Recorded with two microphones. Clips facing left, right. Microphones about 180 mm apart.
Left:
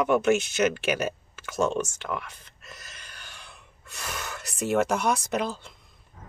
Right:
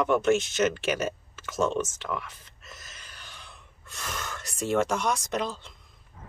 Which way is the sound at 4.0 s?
5° left (ahead or behind).